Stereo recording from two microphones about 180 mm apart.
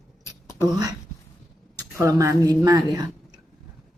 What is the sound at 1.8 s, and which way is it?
A woman's voice, 15° right (ahead or behind).